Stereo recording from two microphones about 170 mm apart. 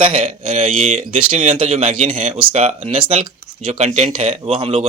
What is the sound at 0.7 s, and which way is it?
Speech, 55° right (ahead or behind).